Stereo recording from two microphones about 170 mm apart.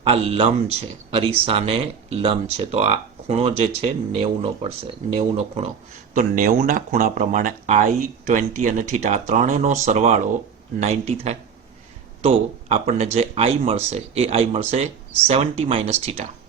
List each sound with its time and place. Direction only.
0.0 s speech: 35° right (ahead or behind)
6.1 s speech: 50° right (ahead or behind)